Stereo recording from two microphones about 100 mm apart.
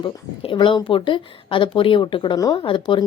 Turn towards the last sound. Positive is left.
turn(degrees=55)  # may be behind; listen again after turning